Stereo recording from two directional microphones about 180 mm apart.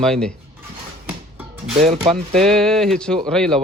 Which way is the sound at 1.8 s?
35° right (ahead or behind).